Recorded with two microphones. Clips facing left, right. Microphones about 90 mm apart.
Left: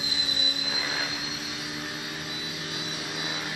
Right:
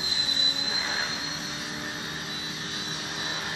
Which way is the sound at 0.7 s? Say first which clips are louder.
Right 1 dB; 30° right (ahead or behind).